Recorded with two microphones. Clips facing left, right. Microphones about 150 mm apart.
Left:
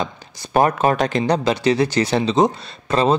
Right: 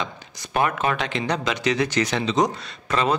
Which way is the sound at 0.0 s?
35° left (ahead or behind).